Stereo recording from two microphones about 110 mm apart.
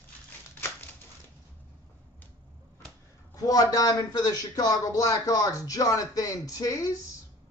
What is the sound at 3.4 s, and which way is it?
A man's voice, 35° left (ahead or behind).